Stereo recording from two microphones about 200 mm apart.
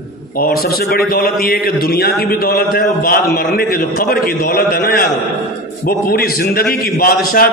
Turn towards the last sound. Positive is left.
turn(degrees=45)  # may be behind; listen again after turning